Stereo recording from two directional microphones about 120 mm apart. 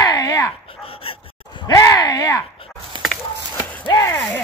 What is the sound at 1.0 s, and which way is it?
Dog, 50° left (ahead or behind).